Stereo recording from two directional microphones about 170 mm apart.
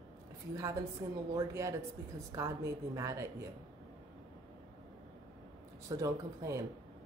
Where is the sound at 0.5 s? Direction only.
20° right (ahead or behind).